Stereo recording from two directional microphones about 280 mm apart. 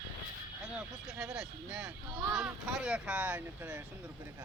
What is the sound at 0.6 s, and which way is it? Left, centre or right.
Speech, centre.